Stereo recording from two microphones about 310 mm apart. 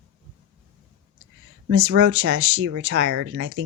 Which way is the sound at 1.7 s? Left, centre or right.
Right.